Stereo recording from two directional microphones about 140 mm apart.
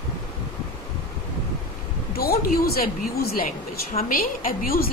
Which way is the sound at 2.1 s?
90° left.